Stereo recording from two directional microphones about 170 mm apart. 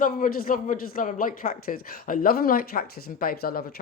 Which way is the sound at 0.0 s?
55° left (ahead or behind).